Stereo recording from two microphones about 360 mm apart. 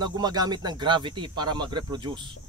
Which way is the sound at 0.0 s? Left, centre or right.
Centre.